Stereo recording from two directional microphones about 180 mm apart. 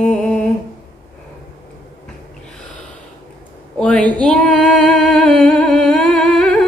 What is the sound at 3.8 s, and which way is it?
Female singing, 5° left (ahead or behind).